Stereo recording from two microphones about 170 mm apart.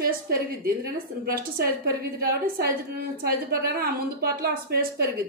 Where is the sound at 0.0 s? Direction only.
60° right (ahead or behind).